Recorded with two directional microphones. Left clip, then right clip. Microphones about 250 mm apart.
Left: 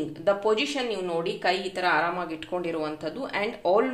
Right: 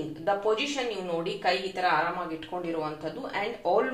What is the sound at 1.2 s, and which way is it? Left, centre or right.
Speech, left.